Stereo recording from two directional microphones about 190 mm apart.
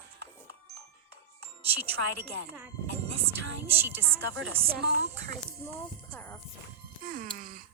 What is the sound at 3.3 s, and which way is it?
Speech, 10° right (ahead or behind).